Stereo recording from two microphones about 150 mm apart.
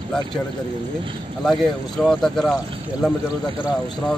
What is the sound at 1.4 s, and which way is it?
Speech, centre (ahead or behind).